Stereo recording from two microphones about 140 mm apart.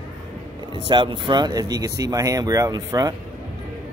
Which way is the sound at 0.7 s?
35° right (ahead or behind).